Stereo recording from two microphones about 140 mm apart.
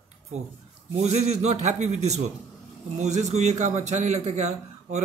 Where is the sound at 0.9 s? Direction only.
50° right (ahead or behind).